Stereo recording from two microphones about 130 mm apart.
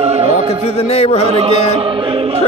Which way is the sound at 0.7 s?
50° left (ahead or behind).